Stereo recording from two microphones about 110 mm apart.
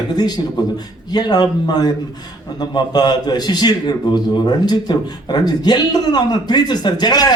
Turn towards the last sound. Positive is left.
turn(degrees=40)  # may be behind; listen again after turning